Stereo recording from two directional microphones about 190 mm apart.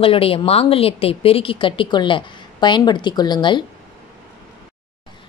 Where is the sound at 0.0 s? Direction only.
30° left (ahead or behind).